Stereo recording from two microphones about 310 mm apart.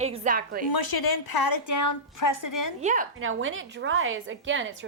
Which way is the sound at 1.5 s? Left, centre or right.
Left.